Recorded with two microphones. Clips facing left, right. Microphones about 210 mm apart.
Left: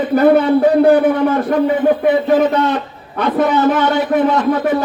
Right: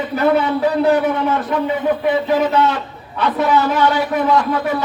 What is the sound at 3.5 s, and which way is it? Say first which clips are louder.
Speech: left 2 dB; 20° left (ahead or behind).